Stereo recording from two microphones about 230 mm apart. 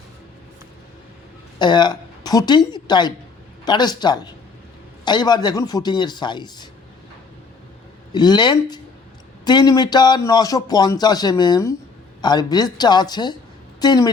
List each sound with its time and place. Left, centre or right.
1.5 s a woman's voice: centre
8.1 s a man's voice: centre